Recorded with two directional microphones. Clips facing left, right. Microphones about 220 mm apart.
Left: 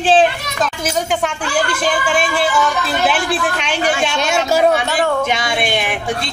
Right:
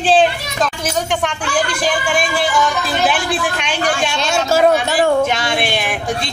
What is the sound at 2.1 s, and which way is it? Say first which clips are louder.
Speech: left 1 dB; 5° left (ahead or behind).